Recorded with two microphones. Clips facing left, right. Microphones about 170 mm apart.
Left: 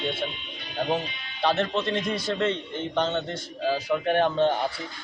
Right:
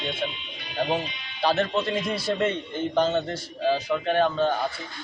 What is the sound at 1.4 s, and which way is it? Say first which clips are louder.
A man's voice: right 1 dB; centre (ahead or behind).